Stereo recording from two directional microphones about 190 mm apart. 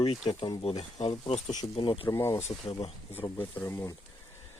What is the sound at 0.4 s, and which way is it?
Speech, 25° left (ahead or behind).